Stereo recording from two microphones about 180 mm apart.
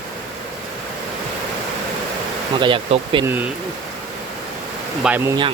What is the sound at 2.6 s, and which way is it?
Speech, 25° right (ahead or behind).